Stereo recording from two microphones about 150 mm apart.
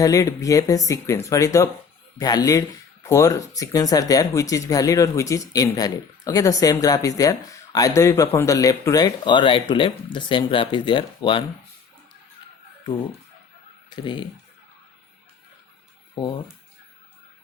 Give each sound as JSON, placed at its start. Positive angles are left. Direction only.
{"t": 0.0, "sound": "speech", "side_deg": 20}
{"t": 13.9, "sound": "speech", "side_deg": 30}